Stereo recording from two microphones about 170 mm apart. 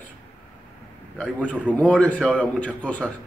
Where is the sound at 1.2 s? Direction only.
10° left (ahead or behind).